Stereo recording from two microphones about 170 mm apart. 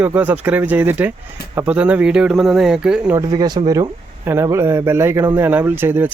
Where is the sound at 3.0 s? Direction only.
20° right (ahead or behind).